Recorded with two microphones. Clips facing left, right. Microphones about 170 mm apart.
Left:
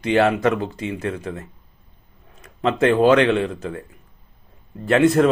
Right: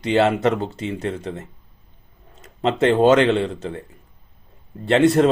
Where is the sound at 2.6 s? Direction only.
25° right (ahead or behind).